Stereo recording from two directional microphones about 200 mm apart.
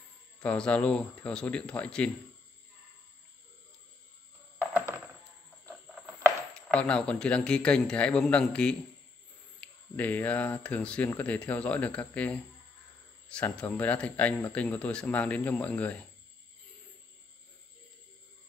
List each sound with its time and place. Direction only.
0.4 s a man's voice: 5° left (ahead or behind)
6.7 s a man's voice: 5° left (ahead or behind)